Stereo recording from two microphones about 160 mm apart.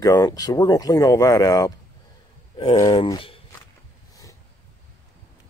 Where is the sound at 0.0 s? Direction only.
20° left (ahead or behind).